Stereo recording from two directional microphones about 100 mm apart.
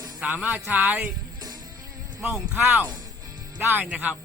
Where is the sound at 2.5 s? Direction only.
20° right (ahead or behind).